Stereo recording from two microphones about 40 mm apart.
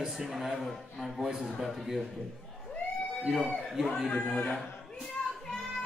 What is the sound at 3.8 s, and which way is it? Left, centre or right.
Speech, centre.